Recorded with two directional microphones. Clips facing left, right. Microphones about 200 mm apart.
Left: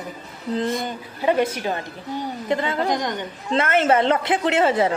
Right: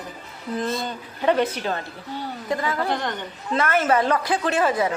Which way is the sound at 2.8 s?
15° left (ahead or behind).